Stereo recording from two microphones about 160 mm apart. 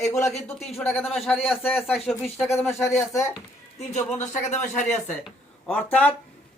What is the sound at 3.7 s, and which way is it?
Speech, 45° left (ahead or behind).